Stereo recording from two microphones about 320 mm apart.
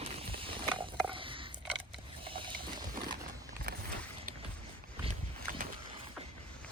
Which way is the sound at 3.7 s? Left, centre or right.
Right.